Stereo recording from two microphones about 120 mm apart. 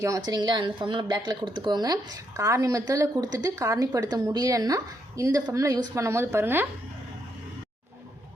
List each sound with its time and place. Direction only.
0.3 s speech: 35° right (ahead or behind); by 6.7 s 20° right (ahead or behind)